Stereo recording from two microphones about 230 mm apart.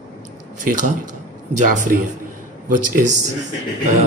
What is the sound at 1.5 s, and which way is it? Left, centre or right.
Speech, right.